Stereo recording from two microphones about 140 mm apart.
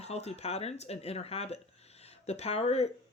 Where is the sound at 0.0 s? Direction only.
50° left (ahead or behind).